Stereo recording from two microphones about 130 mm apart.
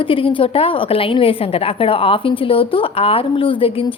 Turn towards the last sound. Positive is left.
turn(degrees=45)  # may be behind; listen again after turning